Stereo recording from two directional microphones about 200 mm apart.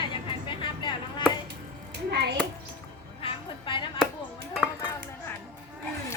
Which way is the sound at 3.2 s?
25° left (ahead or behind).